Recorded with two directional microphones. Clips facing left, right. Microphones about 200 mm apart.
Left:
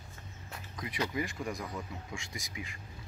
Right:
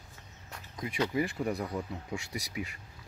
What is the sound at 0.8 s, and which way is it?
Speech, 30° right (ahead or behind).